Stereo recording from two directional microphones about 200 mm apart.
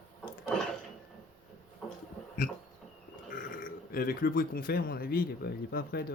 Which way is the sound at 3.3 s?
45° left (ahead or behind).